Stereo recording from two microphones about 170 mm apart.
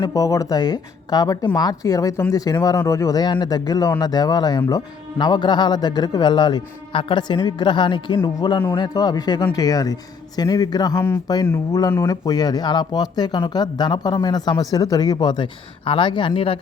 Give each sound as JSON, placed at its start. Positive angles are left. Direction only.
{"t": 0.0, "sound": "speech", "side_deg": 20}